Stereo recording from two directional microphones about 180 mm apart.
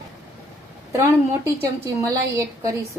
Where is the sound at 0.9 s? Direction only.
15° right (ahead or behind).